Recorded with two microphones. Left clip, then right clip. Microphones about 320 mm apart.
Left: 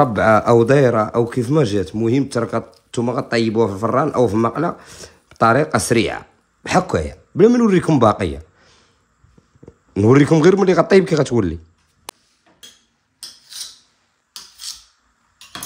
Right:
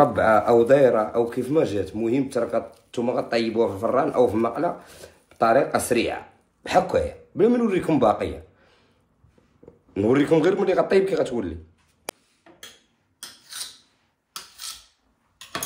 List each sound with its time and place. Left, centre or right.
0.0 s a man's voice: left
9.9 s a man's voice: centre